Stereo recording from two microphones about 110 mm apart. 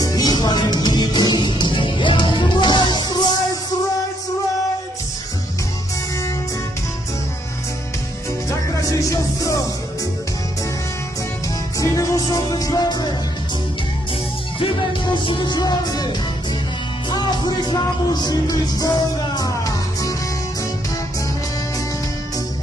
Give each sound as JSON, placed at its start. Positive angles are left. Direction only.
{"t": 0.0, "sound": "music", "side_deg": 35}
{"t": 8.5, "sound": "music", "side_deg": 30}
{"t": 11.8, "sound": "music", "side_deg": 30}
{"t": 14.6, "sound": "music", "side_deg": 45}